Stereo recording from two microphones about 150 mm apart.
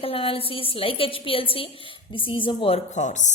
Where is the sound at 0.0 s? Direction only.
40° left (ahead or behind).